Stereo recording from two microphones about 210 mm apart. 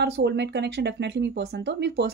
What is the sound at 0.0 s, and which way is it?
A woman's voice, 50° right (ahead or behind).